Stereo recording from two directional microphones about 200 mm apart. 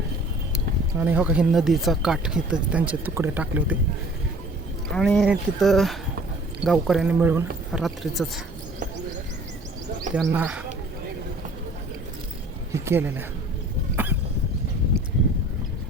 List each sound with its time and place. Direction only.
0.9 s speech: 10° right (ahead or behind)
4.9 s speech: centre (ahead or behind)
10.2 s a man's voice: 5° right (ahead or behind)
12.7 s a man's voice: 15° right (ahead or behind)
13.9 s cough: 10° right (ahead or behind)